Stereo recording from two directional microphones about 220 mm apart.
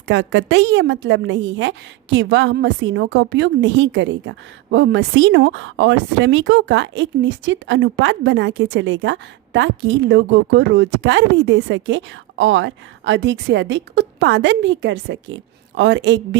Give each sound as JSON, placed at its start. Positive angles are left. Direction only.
{"t": 0.1, "sound": "a woman's voice", "side_deg": -55}